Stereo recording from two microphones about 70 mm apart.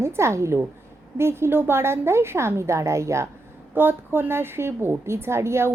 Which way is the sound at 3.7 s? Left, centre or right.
Right.